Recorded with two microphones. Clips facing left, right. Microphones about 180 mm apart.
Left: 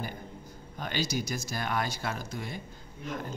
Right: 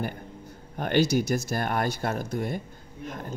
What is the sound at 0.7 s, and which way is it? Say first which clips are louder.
Speech: right 9 dB; 60° right (ahead or behind).